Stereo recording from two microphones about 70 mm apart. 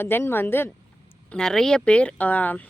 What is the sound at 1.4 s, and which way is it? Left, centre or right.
Speech, centre.